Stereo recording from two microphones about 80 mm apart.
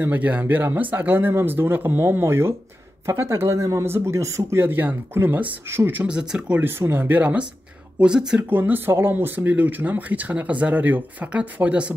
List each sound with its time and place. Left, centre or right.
0.0 s speech: right
6.0 s speech: centre
6.6 s speech: right
8.0 s speech: centre
8.5 s speech: right